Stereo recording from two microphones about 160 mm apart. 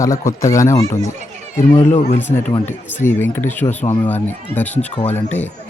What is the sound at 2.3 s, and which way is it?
Speech, 40° left (ahead or behind).